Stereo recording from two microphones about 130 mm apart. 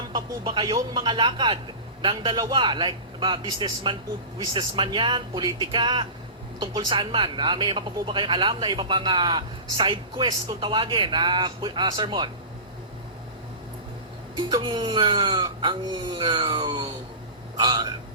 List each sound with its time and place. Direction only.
0.1 s speech: 40° right (ahead or behind)
14.3 s speech: 35° right (ahead or behind)